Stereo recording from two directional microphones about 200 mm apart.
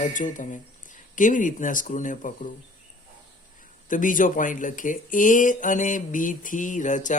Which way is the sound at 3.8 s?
40° left (ahead or behind).